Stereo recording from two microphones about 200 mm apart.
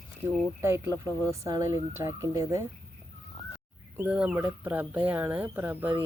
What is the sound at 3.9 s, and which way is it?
Speech, 5° right (ahead or behind).